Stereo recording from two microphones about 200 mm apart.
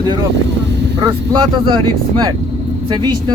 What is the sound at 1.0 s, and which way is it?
Speech, 20° right (ahead or behind).